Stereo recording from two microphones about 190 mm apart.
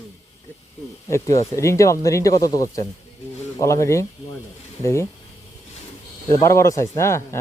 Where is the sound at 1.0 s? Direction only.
15° left (ahead or behind).